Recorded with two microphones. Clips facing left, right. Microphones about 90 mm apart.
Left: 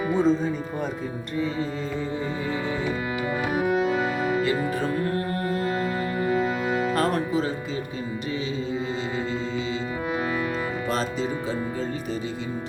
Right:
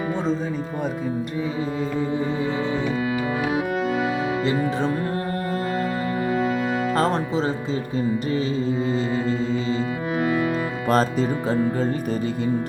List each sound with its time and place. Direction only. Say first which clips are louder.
0.1 s speech: left 5 dB; 5° left (ahead or behind)
3.5 s music: even; centre (ahead or behind)
4.4 s speech: right 3 dB; 25° right (ahead or behind)
5.5 s music: right 1 dB; centre (ahead or behind)
6.9 s speech: right 2 dB; 25° right (ahead or behind)
10.8 s speech: right 9 dB; 45° right (ahead or behind)